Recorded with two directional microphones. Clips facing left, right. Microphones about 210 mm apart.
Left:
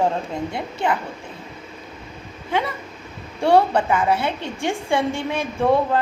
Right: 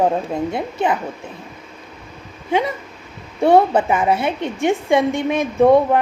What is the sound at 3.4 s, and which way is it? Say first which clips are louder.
A woman's voice: right 3 dB; 20° right (ahead or behind).